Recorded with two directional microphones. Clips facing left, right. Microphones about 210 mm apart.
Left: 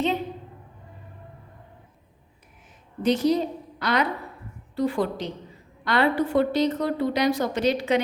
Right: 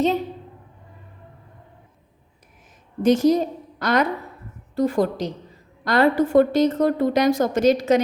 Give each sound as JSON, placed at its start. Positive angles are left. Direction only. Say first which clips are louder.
{"t": 3.0, "sound": "a woman's voice", "louder": "right 5 dB", "side_deg": -45}